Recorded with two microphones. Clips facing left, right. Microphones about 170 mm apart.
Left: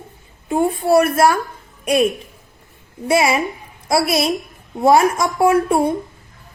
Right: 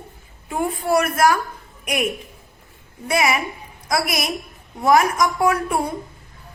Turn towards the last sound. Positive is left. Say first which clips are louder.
# left 6 dB
turn(degrees=25)  # may be behind; listen again after turning